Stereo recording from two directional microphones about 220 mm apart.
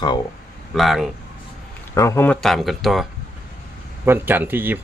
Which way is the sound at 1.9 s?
15° left (ahead or behind).